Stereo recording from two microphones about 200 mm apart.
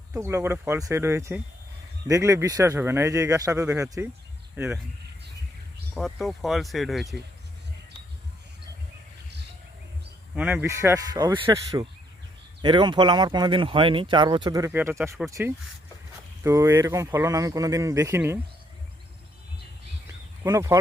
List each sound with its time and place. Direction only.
0.1 s speech: 10° right (ahead or behind)
4.5 s speech: 5° right (ahead or behind)
5.9 s speech: centre (ahead or behind)
10.3 s speech: 10° right (ahead or behind)
20.4 s speech: 15° right (ahead or behind)